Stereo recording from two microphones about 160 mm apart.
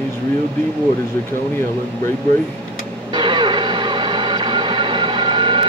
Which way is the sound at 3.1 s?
30° right (ahead or behind).